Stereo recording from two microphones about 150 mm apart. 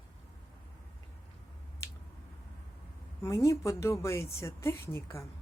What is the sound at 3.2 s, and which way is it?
A woman's voice, 20° left (ahead or behind).